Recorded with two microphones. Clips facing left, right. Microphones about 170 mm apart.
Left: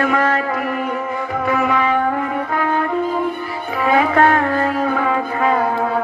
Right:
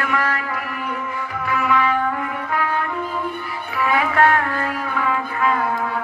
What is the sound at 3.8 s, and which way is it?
Music, 30° left (ahead or behind).